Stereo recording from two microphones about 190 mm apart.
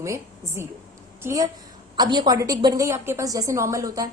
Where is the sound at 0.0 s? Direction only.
15° right (ahead or behind).